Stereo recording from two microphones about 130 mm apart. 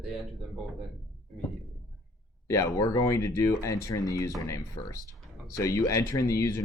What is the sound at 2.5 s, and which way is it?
Speech, 25° left (ahead or behind).